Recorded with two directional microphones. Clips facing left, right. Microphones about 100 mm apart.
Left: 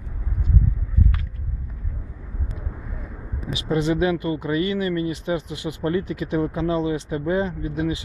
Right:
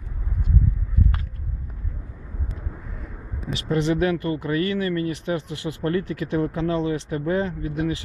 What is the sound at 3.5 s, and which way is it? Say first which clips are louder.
Speech: left 1 dB; 15° left (ahead or behind).